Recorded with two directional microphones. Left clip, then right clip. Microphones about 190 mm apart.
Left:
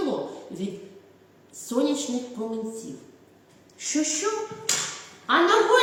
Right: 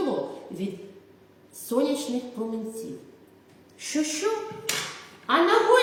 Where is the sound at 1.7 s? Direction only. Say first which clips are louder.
Even; 15° right (ahead or behind).